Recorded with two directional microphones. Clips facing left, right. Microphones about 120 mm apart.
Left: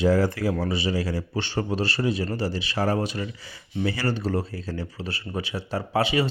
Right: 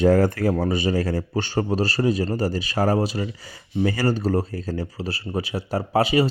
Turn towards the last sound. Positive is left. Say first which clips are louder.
# right 4 dB
turn(degrees=-40)  # may be behind; listen again after turning